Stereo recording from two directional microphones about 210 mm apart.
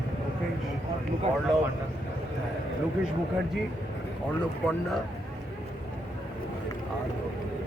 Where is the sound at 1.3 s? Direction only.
35° right (ahead or behind).